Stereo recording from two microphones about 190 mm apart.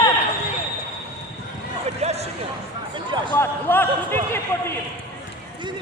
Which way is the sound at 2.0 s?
35° right (ahead or behind).